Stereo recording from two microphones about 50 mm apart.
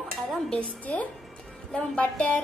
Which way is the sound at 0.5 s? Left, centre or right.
Left.